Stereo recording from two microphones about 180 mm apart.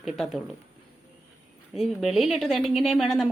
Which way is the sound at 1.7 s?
Centre (ahead or behind).